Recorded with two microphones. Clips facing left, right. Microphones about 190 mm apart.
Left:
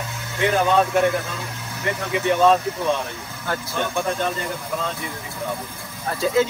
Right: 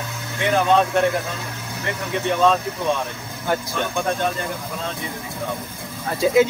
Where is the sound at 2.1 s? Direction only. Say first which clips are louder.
Left 1 dB; 5° left (ahead or behind).